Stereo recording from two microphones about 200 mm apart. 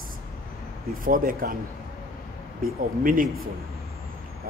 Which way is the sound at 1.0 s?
45° right (ahead or behind).